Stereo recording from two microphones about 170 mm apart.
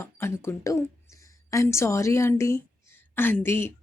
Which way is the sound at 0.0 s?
15° left (ahead or behind).